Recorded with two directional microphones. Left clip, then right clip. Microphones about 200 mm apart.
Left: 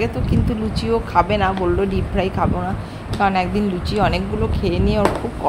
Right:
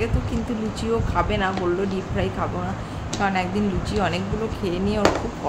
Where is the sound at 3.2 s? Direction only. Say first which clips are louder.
Left 5 dB; 15° left (ahead or behind).